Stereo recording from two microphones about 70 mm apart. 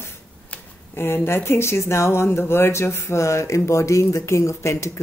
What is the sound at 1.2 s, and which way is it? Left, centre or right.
Speech, left.